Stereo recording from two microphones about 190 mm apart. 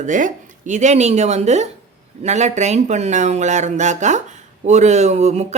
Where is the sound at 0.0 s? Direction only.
40° right (ahead or behind).